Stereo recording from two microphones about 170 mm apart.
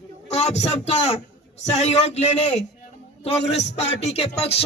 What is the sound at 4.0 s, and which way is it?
Speech, 40° left (ahead or behind).